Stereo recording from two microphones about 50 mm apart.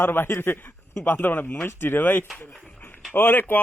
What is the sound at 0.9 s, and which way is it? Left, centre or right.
Speech, left.